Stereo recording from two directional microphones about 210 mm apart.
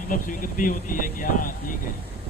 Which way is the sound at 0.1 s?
40° left (ahead or behind).